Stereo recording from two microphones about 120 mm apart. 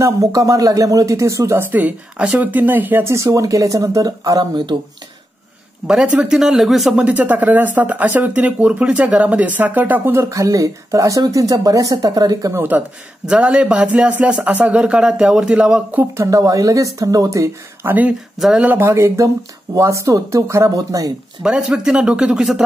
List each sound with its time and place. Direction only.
0.0 s speech: 30° right (ahead or behind)
1.7 s speech: 15° right (ahead or behind); by 4.7 s 35° right (ahead or behind)
5.9 s speech: 5° right (ahead or behind); by 12.6 s 30° right (ahead or behind)
13.3 s speech: 10° right (ahead or behind)
16.0 s speech: 25° right (ahead or behind)
18.4 s speech: 10° right (ahead or behind); by 21.1 s 30° right (ahead or behind)
21.4 s speech: 5° right (ahead or behind)